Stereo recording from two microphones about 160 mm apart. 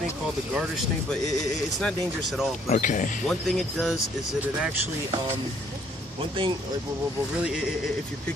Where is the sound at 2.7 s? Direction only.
50° left (ahead or behind).